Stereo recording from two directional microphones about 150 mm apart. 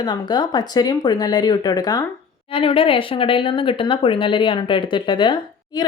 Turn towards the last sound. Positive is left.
turn(degrees=30)  # may be behind; listen again after turning